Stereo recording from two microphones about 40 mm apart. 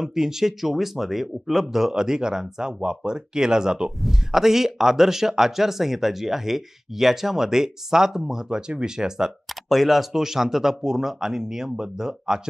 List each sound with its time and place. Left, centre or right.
0.0 s a man's voice: centre
9.7 s a man's voice: centre